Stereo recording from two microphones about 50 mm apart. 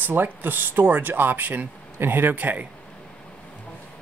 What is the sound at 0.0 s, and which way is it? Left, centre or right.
Speech, right.